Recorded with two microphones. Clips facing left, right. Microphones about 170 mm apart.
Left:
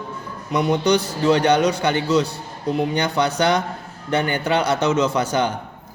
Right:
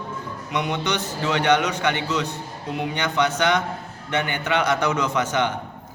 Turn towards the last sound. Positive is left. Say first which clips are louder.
# left 3 dB
turn(degrees=35)  # may be behind; listen again after turning